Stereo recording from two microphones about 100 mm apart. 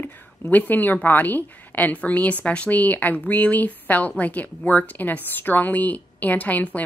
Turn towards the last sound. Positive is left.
turn(degrees=15)  # may be behind; listen again after turning